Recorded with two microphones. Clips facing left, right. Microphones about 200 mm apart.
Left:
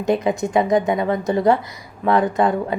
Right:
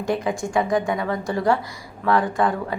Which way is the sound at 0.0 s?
20° left (ahead or behind).